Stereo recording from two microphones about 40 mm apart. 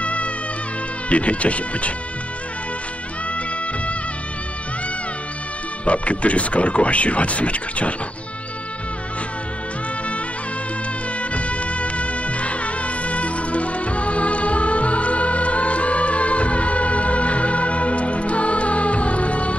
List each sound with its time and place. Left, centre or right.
0.0 s music: left
1.0 s speech: left
5.9 s speech: left
11.1 s music: left